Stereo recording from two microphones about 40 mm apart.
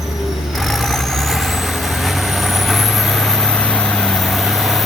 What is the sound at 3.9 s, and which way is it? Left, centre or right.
Vehicle, centre.